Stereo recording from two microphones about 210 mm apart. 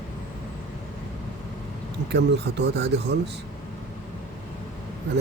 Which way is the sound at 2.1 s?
55° right (ahead or behind).